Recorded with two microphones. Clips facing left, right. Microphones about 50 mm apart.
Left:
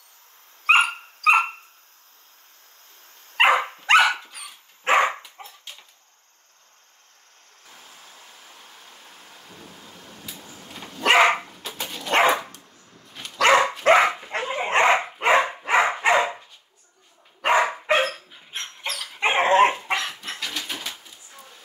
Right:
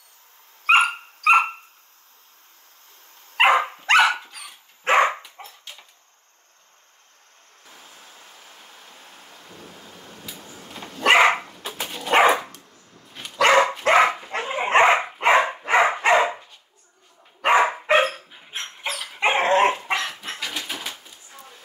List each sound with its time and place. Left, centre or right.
0.7 s dog: centre
3.3 s dog: centre
7.9 s thunder: centre
11.7 s dog: centre
14.6 s dog: centre
17.6 s dog: centre
19.3 s dog: centre
19.7 s dog: centre